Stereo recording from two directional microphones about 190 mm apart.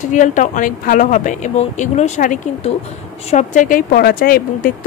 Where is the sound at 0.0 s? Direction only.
40° left (ahead or behind).